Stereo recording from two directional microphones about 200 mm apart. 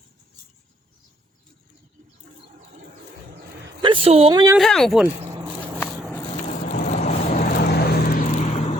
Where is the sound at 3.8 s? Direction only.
25° right (ahead or behind).